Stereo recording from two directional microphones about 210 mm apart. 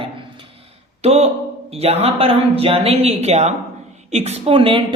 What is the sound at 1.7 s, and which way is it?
A woman's voice, 30° right (ahead or behind).